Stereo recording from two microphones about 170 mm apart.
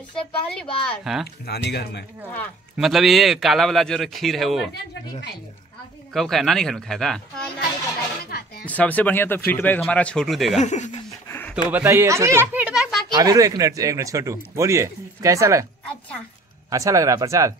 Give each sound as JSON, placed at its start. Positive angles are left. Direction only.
{"t": 0.1, "sound": "speech", "side_deg": 5}
{"t": 1.4, "sound": "speech", "side_deg": 75}
{"t": 2.8, "sound": "speech", "side_deg": 0}
{"t": 6.1, "sound": "speech", "side_deg": 0}
{"t": 8.3, "sound": "a sound", "side_deg": 70}
{"t": 8.6, "sound": "speech", "side_deg": 10}
{"t": 10.6, "sound": "speech", "side_deg": 45}
{"t": 11.2, "sound": "a sound", "side_deg": 10}
{"t": 11.7, "sound": "speech", "side_deg": -15}
{"t": 13.1, "sound": "speech", "side_deg": -20}
{"t": 16.7, "sound": "speech", "side_deg": -20}